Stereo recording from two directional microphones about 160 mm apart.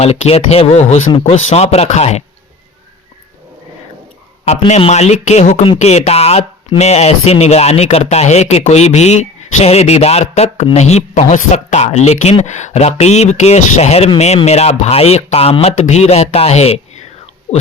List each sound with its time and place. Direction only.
0.0 s speech: 40° left (ahead or behind)
4.7 s speech: 45° left (ahead or behind)